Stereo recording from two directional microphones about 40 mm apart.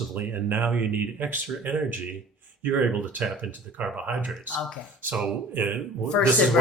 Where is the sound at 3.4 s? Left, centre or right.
Right.